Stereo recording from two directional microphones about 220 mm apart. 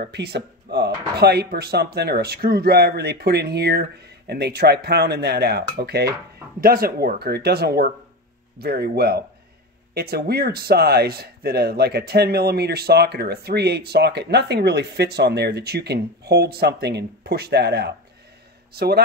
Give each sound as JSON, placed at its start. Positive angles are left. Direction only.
{"t": 0.0, "sound": "a man's voice", "side_deg": -50}